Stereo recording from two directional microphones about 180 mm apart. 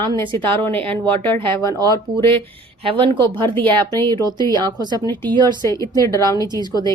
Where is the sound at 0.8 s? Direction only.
30° right (ahead or behind).